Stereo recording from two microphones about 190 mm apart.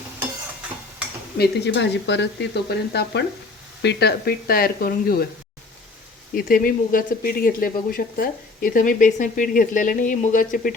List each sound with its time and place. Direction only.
1.4 s speech: 65° left (ahead or behind)
6.3 s speech: 50° left (ahead or behind)